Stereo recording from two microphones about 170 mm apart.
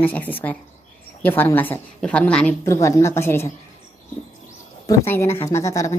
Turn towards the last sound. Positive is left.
turn(degrees=20)  # may be behind; listen again after turning